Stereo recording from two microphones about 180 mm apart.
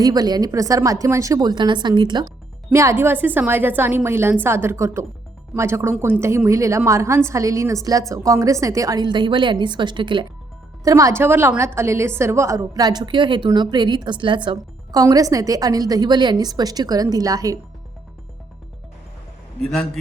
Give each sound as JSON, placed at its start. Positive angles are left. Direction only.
{"t": 0.0, "sound": "a woman's voice", "side_deg": -20}